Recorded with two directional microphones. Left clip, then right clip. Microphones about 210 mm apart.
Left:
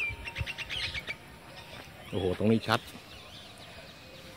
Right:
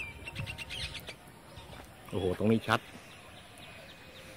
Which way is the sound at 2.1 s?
Centre (ahead or behind).